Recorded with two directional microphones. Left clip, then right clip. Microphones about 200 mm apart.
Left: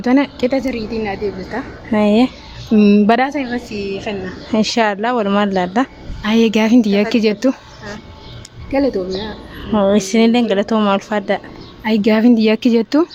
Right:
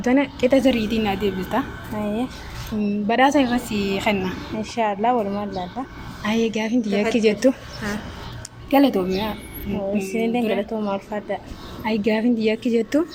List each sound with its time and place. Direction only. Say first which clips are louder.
0.0 s a woman's voice: left 4 dB; 35° left (ahead or behind)
0.6 s a woman's voice: right 2 dB; 15° right (ahead or behind)
1.0 s speech: left 2 dB; 30° right (ahead or behind)
2.0 s speech: left 13 dB; 50° left (ahead or behind)
3.2 s a woman's voice: right 3 dB; 5° right (ahead or behind)
3.7 s a woman's voice: even; 20° right (ahead or behind)
4.5 s a woman's voice: left 9 dB; 45° left (ahead or behind)
8.7 s a woman's voice: left 1 dB; 25° right (ahead or behind)
9.9 s speech: left 7 dB; 50° left (ahead or behind)
11.9 s a woman's voice: left 7 dB; 40° left (ahead or behind)